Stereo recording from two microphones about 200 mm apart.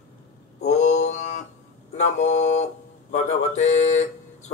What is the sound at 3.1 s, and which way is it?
Speech, 35° left (ahead or behind).